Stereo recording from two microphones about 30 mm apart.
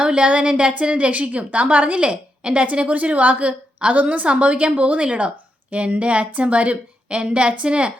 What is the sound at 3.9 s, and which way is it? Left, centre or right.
Speech, right.